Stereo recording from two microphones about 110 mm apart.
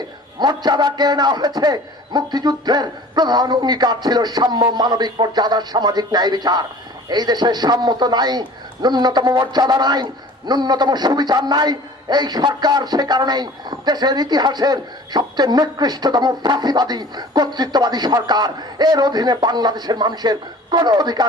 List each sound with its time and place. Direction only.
0.4 s a man's voice: 40° right (ahead or behind)